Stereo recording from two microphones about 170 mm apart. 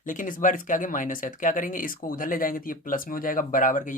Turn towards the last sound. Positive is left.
turn(degrees=50)  # may be behind; listen again after turning